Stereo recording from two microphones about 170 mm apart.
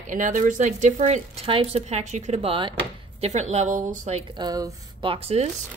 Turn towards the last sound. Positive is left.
turn(degrees=-35)  # may be behind; listen again after turning